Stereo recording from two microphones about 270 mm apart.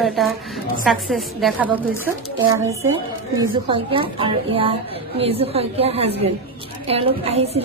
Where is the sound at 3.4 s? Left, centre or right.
Centre.